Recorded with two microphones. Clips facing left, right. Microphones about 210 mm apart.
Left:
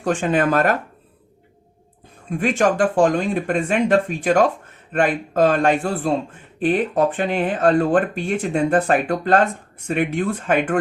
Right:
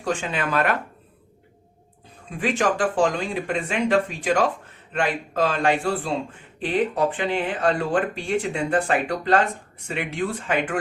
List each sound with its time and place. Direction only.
0.0 s speech: 50° left (ahead or behind)
2.4 s speech: 45° left (ahead or behind)